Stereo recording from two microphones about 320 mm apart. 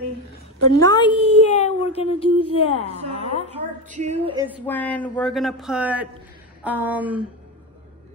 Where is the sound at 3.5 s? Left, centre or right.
Right.